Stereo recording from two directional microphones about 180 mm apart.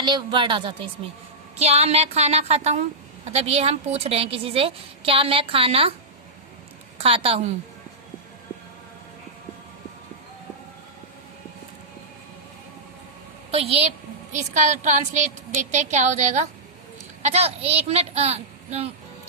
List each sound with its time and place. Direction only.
0.0 s a woman's voice: 25° right (ahead or behind)
7.0 s a woman's voice: 35° right (ahead or behind)
13.5 s a woman's voice: 35° right (ahead or behind)